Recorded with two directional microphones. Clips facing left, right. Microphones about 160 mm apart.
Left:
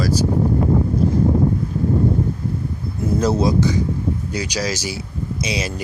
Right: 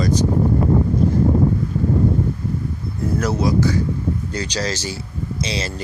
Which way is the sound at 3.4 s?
20° left (ahead or behind).